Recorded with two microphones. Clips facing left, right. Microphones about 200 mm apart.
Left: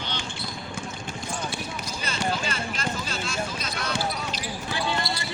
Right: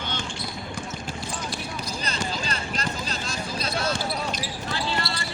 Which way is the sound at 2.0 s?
35° right (ahead or behind).